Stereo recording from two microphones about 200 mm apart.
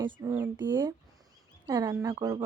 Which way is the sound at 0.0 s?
25° right (ahead or behind).